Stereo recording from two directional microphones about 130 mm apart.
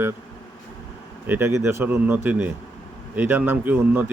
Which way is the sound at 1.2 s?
15° right (ahead or behind).